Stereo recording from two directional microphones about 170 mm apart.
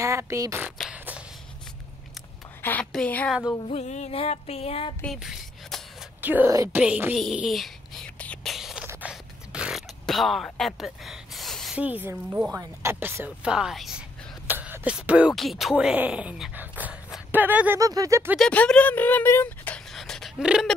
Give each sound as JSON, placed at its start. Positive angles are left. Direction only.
{"t": 0.0, "sound": "a sound", "side_deg": -15}
{"t": 2.6, "sound": "a woman's voice", "side_deg": 5}
{"t": 3.6, "sound": "music", "side_deg": 40}
{"t": 5.0, "sound": "a sound", "side_deg": 0}
{"t": 6.2, "sound": "speech", "side_deg": -10}
{"t": 6.8, "sound": "whispering", "side_deg": -10}
{"t": 8.5, "sound": "a sound", "side_deg": 0}
{"t": 14.5, "sound": "speech", "side_deg": -10}
{"t": 18.4, "sound": "speech", "side_deg": 5}